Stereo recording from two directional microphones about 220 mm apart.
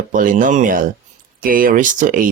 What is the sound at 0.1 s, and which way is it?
Speech, 35° right (ahead or behind).